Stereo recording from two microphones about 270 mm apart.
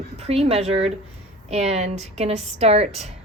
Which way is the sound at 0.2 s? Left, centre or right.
Right.